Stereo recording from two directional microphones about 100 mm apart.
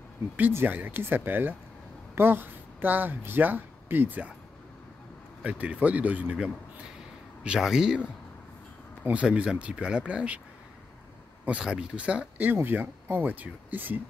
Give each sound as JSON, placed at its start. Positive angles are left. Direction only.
{"t": 0.4, "sound": "speech", "side_deg": -20}
{"t": 5.4, "sound": "speech", "side_deg": -15}
{"t": 11.4, "sound": "speech", "side_deg": -10}